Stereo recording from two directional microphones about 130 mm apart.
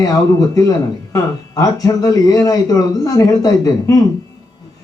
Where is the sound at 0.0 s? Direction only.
25° left (ahead or behind).